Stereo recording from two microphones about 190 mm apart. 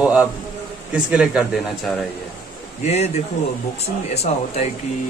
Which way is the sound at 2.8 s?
35° left (ahead or behind).